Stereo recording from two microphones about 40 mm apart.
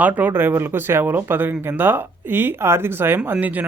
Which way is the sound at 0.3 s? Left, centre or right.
Right.